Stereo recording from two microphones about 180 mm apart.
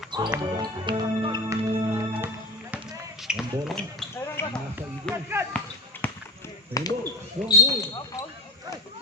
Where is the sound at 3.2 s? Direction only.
Centre (ahead or behind).